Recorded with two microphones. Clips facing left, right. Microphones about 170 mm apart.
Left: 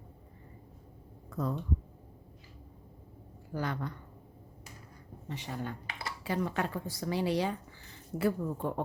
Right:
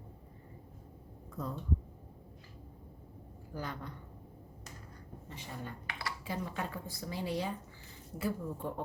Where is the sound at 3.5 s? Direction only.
80° left.